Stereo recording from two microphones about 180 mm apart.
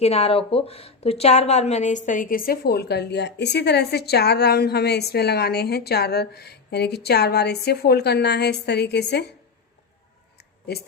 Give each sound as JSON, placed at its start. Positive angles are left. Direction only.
{"t": 0.0, "sound": "a woman's voice", "side_deg": 35}